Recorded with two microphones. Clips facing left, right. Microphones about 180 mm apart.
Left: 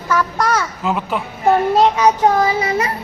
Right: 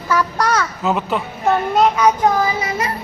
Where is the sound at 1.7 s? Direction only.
30° left (ahead or behind).